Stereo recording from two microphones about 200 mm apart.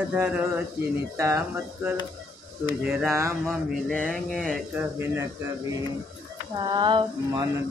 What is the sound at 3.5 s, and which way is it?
Speech, centre (ahead or behind).